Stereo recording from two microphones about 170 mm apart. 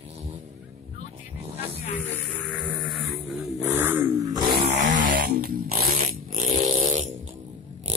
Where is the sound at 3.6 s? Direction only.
10° right (ahead or behind).